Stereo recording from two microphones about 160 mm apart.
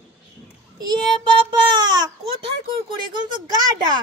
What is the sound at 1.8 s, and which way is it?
Baby cry, 25° right (ahead or behind).